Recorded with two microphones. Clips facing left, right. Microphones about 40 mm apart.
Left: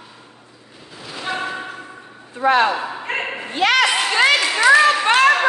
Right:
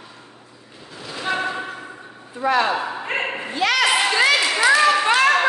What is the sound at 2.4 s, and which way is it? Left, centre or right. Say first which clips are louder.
Speech: left 4 dB; left.